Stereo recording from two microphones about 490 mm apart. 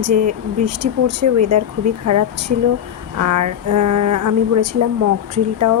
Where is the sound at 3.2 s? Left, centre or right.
Right.